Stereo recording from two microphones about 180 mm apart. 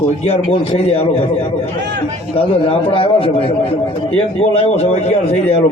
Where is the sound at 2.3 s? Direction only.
30° left (ahead or behind).